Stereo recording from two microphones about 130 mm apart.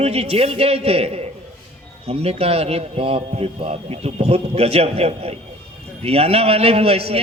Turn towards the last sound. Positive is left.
turn(degrees=-50)  # may be behind; listen again after turning